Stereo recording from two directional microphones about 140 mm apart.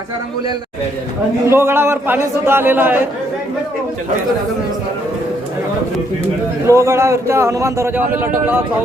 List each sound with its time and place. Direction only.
1.5 s a man's voice: 15° right (ahead or behind)
6.7 s a man's voice: 20° right (ahead or behind)